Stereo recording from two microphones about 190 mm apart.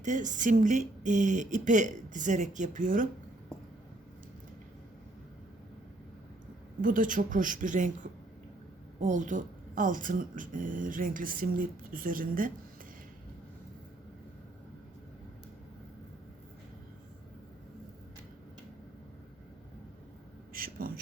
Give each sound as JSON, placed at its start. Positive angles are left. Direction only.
{"t": 0.0, "sound": "speech", "side_deg": -40}
{"t": 6.8, "sound": "speech", "side_deg": -45}
{"t": 20.5, "sound": "a sound", "side_deg": -50}